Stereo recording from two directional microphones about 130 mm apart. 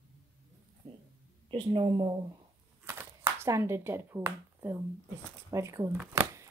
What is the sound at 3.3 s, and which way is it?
Speech, 20° right (ahead or behind).